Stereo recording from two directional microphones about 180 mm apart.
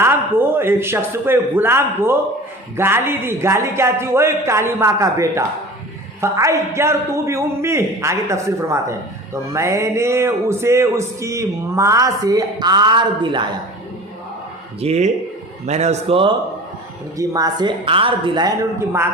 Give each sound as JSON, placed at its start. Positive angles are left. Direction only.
{"t": 0.0, "sound": "a man's voice", "side_deg": -10}
{"t": 14.8, "sound": "a man's voice", "side_deg": -35}
{"t": 17.2, "sound": "speech", "side_deg": -20}